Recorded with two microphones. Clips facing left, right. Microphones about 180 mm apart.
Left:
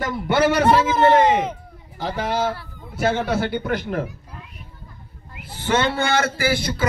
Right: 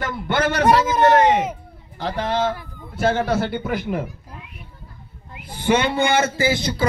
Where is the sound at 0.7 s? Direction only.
10° right (ahead or behind).